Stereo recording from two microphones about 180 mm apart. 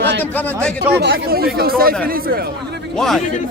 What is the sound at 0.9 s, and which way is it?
A man's voice, 60° right (ahead or behind).